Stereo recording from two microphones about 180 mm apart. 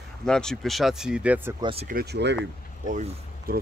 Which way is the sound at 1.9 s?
60° right (ahead or behind).